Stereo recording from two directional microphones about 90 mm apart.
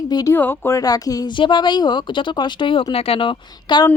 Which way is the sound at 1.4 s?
60° left (ahead or behind).